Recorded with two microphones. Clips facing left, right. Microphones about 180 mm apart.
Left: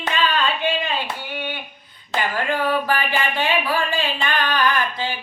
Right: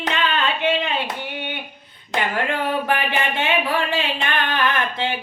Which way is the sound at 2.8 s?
20° right (ahead or behind).